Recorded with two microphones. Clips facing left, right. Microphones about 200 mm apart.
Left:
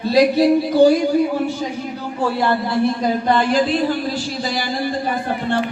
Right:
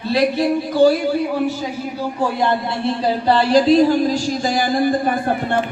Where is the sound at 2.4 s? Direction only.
20° right (ahead or behind).